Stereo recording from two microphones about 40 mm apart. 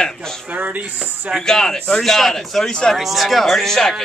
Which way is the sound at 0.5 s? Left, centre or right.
Right.